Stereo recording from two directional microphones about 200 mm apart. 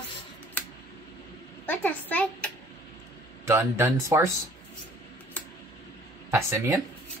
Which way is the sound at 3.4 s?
15° right (ahead or behind).